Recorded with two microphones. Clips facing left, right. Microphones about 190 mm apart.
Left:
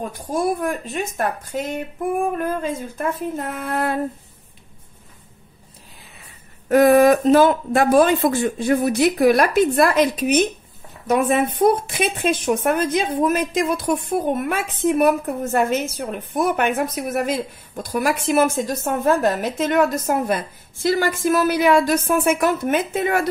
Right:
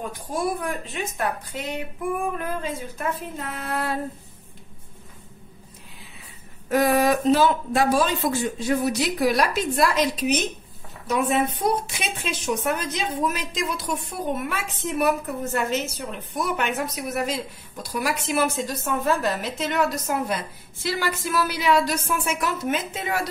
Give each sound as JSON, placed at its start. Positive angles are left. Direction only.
{"t": 0.3, "sound": "speech", "side_deg": 45}
{"t": 6.7, "sound": "speech", "side_deg": 50}